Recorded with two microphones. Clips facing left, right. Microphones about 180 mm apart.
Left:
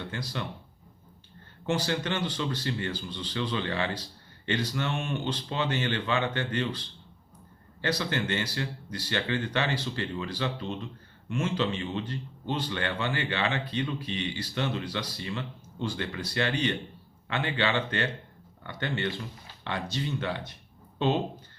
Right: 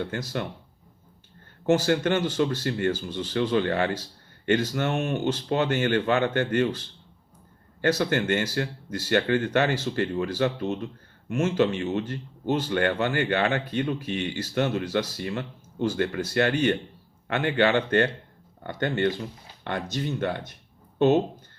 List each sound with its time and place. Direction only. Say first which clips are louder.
0.0 s speech: right 6 dB; 50° right (ahead or behind)
1.6 s speech: right 7 dB; 45° right (ahead or behind)